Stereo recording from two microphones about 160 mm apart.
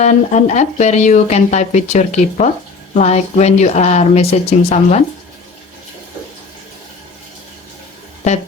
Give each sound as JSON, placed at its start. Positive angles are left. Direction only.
{"t": 0.0, "sound": "speech", "side_deg": 45}